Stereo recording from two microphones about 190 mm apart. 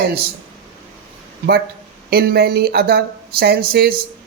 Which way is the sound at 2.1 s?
55° right (ahead or behind).